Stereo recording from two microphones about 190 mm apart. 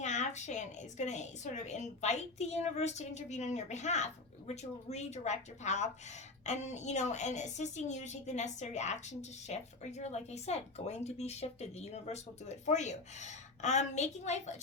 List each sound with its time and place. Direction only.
0.0 s a woman's voice: 40° left (ahead or behind)